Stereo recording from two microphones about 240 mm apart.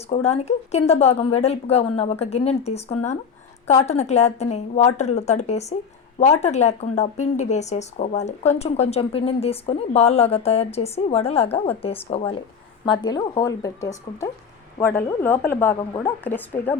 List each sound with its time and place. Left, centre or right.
0.1 s speech: left; by 16.7 s centre